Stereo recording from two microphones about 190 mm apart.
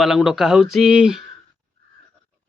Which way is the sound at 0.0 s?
Centre (ahead or behind).